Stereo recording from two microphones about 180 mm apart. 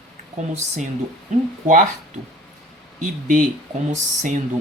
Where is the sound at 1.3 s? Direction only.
40° right (ahead or behind).